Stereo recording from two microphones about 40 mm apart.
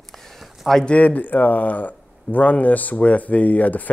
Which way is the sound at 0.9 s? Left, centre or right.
Left.